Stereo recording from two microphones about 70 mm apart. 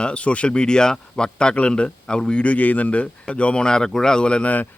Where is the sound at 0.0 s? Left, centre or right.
Centre.